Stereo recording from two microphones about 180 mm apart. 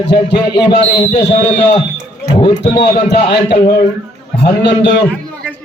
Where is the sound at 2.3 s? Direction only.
25° left (ahead or behind).